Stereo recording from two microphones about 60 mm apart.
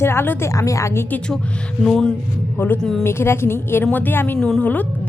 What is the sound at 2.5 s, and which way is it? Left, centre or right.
Speech, left.